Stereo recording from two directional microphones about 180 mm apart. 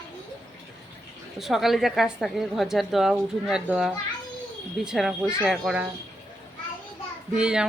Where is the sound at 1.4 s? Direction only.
Centre (ahead or behind).